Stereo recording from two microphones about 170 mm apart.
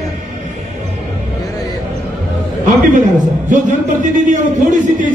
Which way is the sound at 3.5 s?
50° right (ahead or behind).